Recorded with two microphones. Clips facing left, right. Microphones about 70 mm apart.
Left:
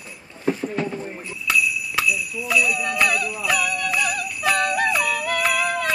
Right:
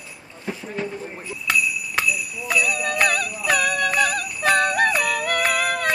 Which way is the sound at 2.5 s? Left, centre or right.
Right.